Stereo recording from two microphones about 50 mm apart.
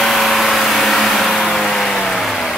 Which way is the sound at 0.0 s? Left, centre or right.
Centre.